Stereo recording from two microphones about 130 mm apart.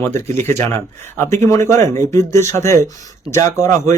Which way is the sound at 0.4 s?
20° left (ahead or behind).